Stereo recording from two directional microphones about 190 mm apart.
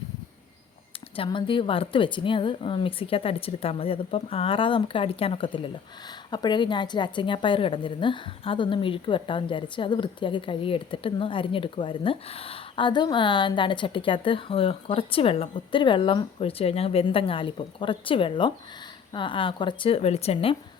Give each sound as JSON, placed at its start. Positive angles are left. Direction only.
{"t": 1.1, "sound": "a woman's voice", "side_deg": 25}